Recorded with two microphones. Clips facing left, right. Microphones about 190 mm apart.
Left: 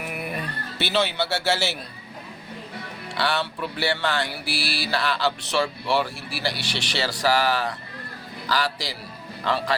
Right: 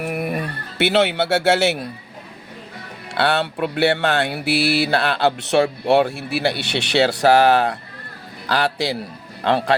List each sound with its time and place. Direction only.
0.0 s music: 50° right (ahead or behind)
3.2 s speech: 60° right (ahead or behind)